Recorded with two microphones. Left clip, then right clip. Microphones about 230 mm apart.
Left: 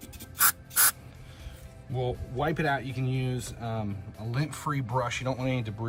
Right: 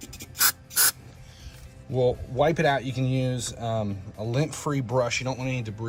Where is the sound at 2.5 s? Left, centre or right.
Right.